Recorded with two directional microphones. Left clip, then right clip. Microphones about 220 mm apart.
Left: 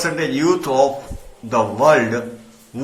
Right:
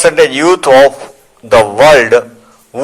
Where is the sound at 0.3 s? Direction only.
50° right (ahead or behind).